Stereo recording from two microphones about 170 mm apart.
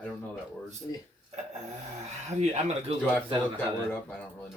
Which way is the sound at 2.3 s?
35° right (ahead or behind).